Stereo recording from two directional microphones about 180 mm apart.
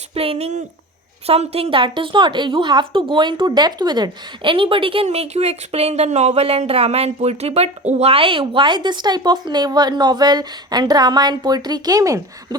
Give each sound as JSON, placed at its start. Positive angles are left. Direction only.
{"t": 0.1, "sound": "a woman's voice", "side_deg": -35}